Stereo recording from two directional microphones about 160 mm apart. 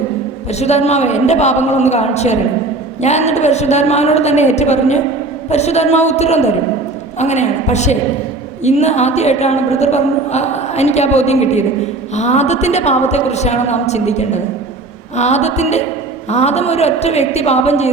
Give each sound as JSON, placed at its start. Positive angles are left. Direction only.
{"t": 0.6, "sound": "a woman's voice", "side_deg": 45}